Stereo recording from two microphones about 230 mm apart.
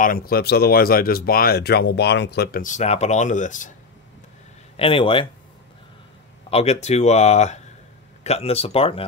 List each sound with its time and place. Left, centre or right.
0.0 s speech: left
4.7 s speech: left
6.5 s speech: left